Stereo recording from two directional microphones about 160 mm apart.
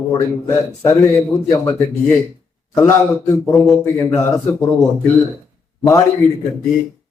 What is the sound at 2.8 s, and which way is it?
Speech, 15° left (ahead or behind).